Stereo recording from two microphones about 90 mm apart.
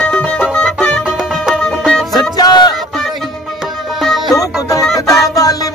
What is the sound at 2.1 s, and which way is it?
Music, 50° left (ahead or behind).